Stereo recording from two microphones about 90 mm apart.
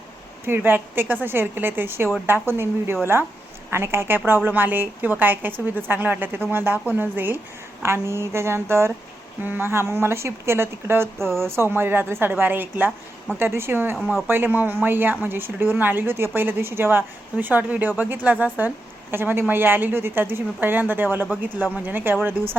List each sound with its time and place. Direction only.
0.4 s a woman's voice: 25° right (ahead or behind)
14.0 s speech: 5° left (ahead or behind)
14.3 s a woman's voice: 20° right (ahead or behind)